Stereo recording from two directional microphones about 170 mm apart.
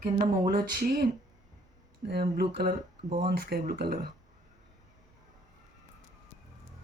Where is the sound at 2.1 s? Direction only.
70° right (ahead or behind).